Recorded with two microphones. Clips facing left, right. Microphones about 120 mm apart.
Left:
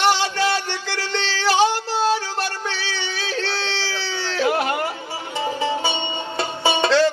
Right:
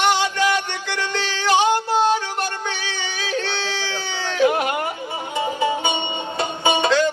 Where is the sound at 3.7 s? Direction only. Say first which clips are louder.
Even; 15° right (ahead or behind).